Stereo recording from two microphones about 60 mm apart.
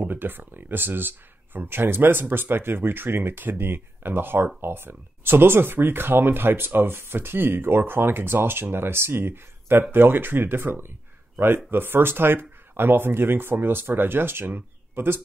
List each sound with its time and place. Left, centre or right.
0.0 s speech: right